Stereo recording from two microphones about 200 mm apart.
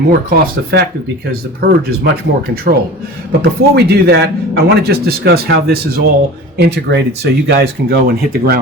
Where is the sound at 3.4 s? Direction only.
55° right (ahead or behind).